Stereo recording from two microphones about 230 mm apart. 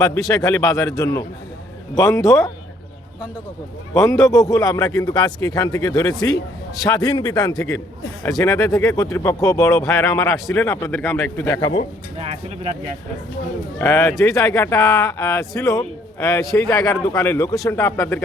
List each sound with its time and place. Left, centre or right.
0.3 s a man's voice: centre
3.9 s a man's voice: centre
12.1 s speech: right
13.7 s a man's voice: centre